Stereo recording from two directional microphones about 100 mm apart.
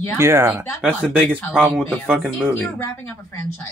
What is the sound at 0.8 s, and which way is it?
Speech, 15° right (ahead or behind).